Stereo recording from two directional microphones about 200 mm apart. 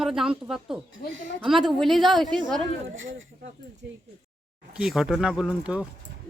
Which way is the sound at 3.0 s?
75° right (ahead or behind).